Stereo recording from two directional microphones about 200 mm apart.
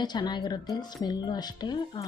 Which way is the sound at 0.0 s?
20° left (ahead or behind).